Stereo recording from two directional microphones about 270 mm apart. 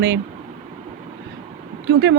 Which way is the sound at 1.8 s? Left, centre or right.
Right.